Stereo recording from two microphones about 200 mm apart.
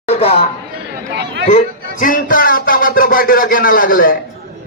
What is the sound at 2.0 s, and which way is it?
Music, 45° left (ahead or behind).